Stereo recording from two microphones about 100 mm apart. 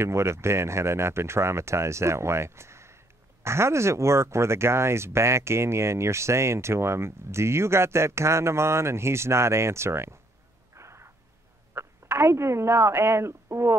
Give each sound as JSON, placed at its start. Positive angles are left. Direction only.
{"t": 0.0, "sound": "speech", "side_deg": -25}
{"t": 10.7, "sound": "a sound", "side_deg": -30}
{"t": 11.7, "sound": "speech", "side_deg": -25}